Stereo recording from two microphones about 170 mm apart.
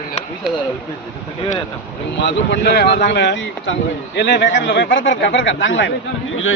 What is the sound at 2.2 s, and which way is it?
Speech, 75° left (ahead or behind).